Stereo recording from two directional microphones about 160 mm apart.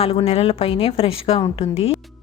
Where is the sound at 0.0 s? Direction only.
40° left (ahead or behind).